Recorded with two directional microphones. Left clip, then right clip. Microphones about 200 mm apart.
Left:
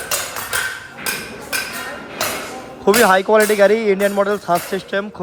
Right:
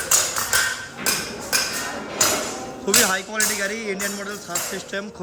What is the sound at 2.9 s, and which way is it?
Speech, 10° left (ahead or behind).